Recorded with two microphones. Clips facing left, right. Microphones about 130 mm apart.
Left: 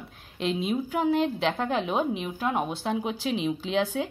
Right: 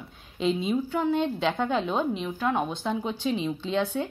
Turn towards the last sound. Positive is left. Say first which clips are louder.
# even
turn(degrees=90)